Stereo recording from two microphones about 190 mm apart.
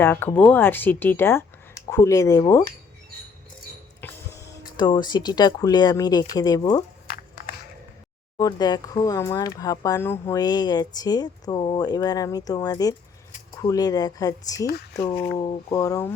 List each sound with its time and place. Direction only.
0.0 s speech: 10° left (ahead or behind)
4.0 s music: 10° left (ahead or behind)
4.4 s speech: 20° left (ahead or behind)
7.1 s a sound: 50° left (ahead or behind)
8.4 s speech: 20° left (ahead or behind)
15.7 s speech: 15° left (ahead or behind)